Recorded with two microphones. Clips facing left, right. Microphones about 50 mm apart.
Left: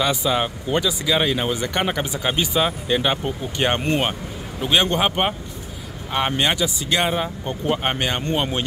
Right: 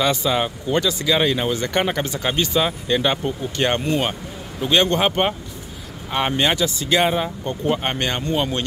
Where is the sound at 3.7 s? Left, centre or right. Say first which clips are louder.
Even; left.